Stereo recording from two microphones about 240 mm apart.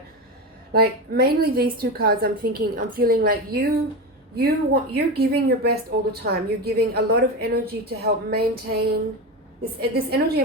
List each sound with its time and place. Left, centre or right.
0.7 s a woman's voice: right
9.9 s a woman's voice: right